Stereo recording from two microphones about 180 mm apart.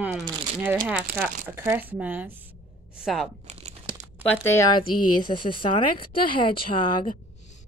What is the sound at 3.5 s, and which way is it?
Crumpling, 35° right (ahead or behind).